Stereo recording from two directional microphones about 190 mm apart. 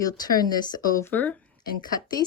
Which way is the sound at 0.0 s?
20° left (ahead or behind).